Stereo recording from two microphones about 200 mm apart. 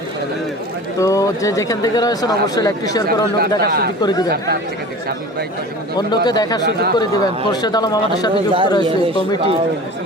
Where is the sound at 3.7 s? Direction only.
50° right (ahead or behind).